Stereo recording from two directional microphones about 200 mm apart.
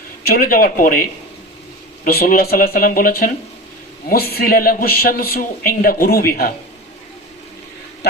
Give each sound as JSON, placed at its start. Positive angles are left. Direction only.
{"t": 0.3, "sound": "speech", "side_deg": 50}
{"t": 2.0, "sound": "speech", "side_deg": 50}